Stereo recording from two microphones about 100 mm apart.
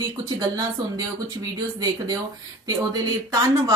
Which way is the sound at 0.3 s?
40° right (ahead or behind).